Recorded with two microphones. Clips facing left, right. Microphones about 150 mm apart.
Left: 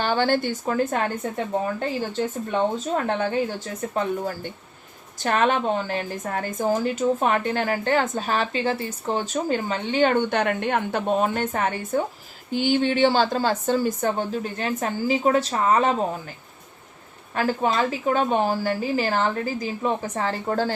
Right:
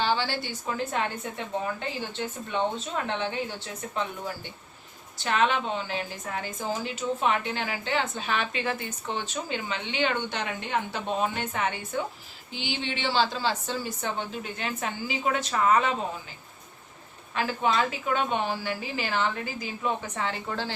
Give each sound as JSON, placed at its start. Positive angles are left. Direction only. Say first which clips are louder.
{"t": 0.0, "sound": "a woman's voice", "louder": "left 6 dB", "side_deg": 50}
{"t": 17.3, "sound": "a woman's voice", "louder": "left 3 dB", "side_deg": 40}